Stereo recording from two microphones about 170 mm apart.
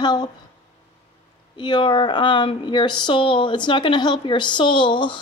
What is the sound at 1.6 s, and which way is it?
Speech, 30° left (ahead or behind).